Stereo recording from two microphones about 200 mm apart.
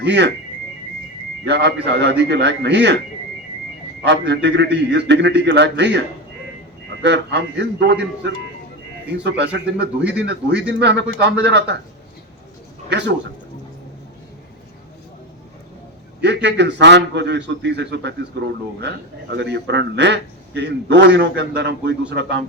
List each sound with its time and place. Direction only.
0.0 s a man's voice: 60° right (ahead or behind)
1.5 s a man's voice: 60° right (ahead or behind)
4.0 s a man's voice: 60° right (ahead or behind)
7.0 s a man's voice: 60° right (ahead or behind)
12.9 s a man's voice: 60° right (ahead or behind)
16.2 s a man's voice: 60° right (ahead or behind)
19.4 s a man's voice: 60° right (ahead or behind)